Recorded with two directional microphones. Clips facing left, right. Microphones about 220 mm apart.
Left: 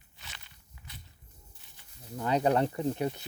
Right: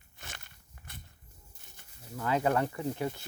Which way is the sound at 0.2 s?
50° right (ahead or behind).